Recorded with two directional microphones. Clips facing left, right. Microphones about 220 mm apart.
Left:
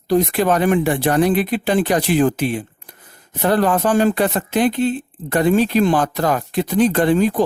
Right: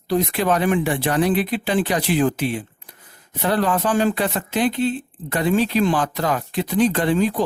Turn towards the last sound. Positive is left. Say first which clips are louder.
# left 4 dB
turn(degrees=50)  # may be behind; listen again after turning